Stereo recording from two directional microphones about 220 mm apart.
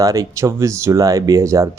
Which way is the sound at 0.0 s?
15° right (ahead or behind).